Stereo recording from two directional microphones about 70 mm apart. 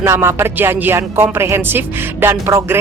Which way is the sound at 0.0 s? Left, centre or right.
Right.